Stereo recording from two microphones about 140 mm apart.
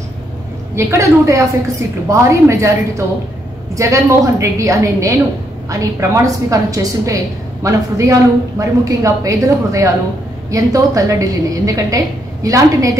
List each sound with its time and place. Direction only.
0.7 s a woman's voice: 20° right (ahead or behind)
3.7 s a woman's voice: 20° right (ahead or behind)